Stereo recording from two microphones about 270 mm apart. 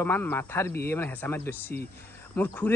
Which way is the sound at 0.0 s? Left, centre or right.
Centre.